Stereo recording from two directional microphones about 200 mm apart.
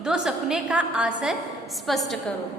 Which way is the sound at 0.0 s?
5° right (ahead or behind).